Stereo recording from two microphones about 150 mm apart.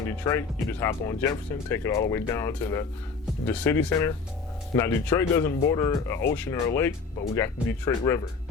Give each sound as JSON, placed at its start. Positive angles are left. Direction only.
{"t": 0.3, "sound": "speech", "side_deg": 15}